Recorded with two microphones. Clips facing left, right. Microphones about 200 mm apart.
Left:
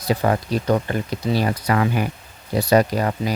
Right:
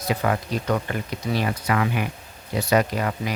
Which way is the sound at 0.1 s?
35° left (ahead or behind).